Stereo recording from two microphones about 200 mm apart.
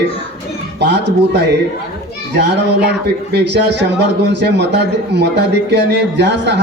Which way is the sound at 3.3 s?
55° right (ahead or behind).